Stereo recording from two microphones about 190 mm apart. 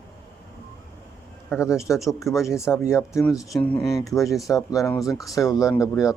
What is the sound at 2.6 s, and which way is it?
Speech, 15° left (ahead or behind).